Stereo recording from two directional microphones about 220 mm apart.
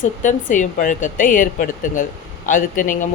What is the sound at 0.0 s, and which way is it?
Speech, 35° left (ahead or behind).